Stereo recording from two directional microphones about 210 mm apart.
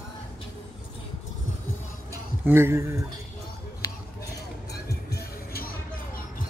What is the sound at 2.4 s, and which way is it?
Speech, 10° right (ahead or behind).